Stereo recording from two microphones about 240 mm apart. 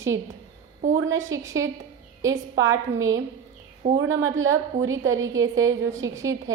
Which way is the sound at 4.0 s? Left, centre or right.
Right.